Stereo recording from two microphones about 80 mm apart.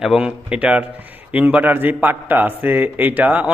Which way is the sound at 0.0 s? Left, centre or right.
Centre.